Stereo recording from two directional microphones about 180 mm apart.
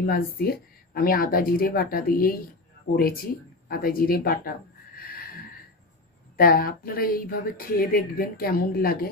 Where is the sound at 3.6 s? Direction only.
55° left (ahead or behind).